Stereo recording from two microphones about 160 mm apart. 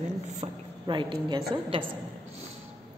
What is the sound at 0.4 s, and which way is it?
Speech, 40° right (ahead or behind).